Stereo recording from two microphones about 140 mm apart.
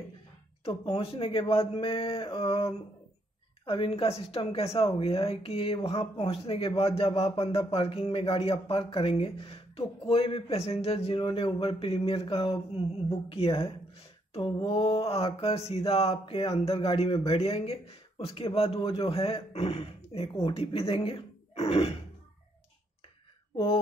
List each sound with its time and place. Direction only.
0.7 s mantra: 40° left (ahead or behind)
3.6 s speech: 40° left (ahead or behind)
23.5 s speech: 40° left (ahead or behind)